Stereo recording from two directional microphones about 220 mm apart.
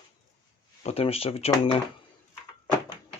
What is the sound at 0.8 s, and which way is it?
Speech, 30° left (ahead or behind).